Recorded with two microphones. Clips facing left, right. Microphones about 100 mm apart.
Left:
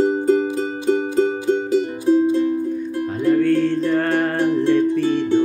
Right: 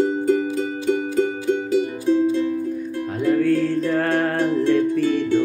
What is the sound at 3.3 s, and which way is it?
Music, 5° right (ahead or behind).